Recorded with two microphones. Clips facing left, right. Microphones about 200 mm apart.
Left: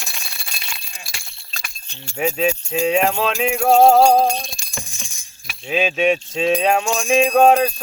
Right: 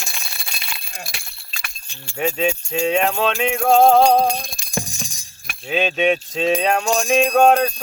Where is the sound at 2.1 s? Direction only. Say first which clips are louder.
Left 1 dB; centre (ahead or behind).